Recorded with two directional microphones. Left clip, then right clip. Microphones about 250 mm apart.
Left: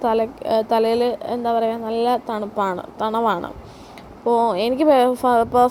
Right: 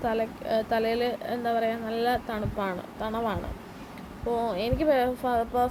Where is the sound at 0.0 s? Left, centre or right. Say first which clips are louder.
Left 9 dB; left.